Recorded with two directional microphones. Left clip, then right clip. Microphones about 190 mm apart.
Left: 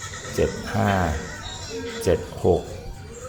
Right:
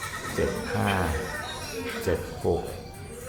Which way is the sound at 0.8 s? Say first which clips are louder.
Left 5 dB; 25° left (ahead or behind).